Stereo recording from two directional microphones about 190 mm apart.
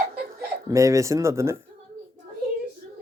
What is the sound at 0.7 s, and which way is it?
Speech, 15° right (ahead or behind).